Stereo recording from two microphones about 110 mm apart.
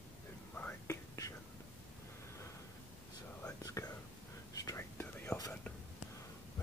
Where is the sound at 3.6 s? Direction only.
30° left (ahead or behind).